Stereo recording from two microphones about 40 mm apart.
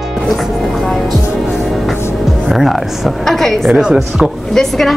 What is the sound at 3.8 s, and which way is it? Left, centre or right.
Speech, centre.